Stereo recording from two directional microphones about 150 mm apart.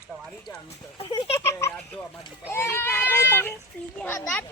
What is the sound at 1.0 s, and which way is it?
Speech, 30° left (ahead or behind).